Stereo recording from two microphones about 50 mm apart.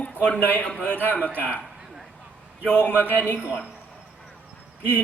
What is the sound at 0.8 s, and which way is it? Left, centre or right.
Speech, left.